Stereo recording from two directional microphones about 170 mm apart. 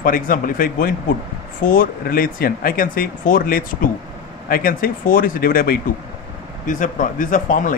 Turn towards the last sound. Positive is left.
turn(degrees=50)  # may be behind; listen again after turning